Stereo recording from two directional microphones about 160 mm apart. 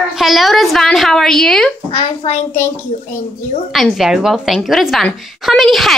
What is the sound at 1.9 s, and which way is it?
Speech, 40° left (ahead or behind).